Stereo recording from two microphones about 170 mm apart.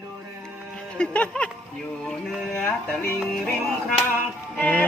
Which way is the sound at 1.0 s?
5° left (ahead or behind).